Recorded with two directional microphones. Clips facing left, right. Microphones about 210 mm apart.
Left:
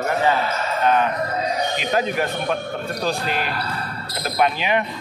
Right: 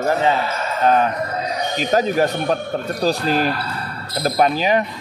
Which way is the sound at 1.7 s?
40° right (ahead or behind).